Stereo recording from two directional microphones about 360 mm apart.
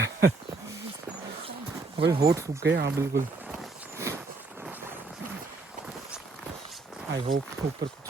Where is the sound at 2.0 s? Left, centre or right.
Centre.